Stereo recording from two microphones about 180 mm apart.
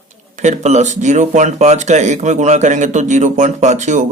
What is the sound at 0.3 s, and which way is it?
Speech, 40° right (ahead or behind).